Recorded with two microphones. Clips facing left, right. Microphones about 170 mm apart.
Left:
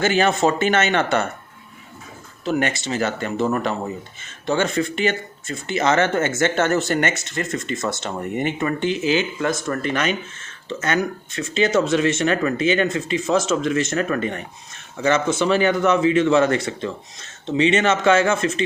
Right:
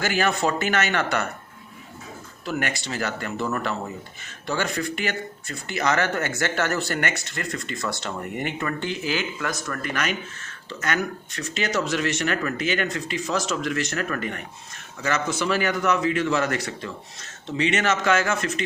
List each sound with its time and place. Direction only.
0.0 s speech: 25° left (ahead or behind)
2.4 s speech: 25° left (ahead or behind)